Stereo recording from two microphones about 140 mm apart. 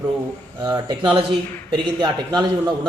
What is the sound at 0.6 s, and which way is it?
Speech, 30° right (ahead or behind).